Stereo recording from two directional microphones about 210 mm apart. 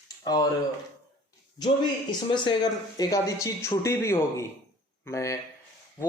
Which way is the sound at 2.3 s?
20° left (ahead or behind).